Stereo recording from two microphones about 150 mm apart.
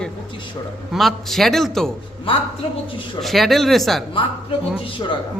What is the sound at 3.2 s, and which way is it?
Speech, centre (ahead or behind).